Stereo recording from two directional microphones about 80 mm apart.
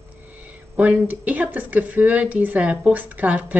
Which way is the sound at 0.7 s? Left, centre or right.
Centre.